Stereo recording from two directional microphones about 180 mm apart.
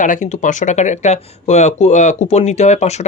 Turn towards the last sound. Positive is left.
turn(degrees=40)  # may be behind; listen again after turning